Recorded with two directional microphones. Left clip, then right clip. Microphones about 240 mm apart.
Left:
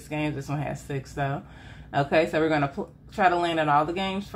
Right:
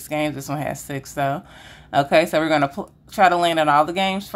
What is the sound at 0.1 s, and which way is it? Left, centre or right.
Speech, right.